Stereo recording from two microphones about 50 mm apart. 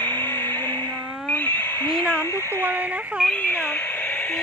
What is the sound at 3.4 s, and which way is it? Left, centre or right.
Radio, left.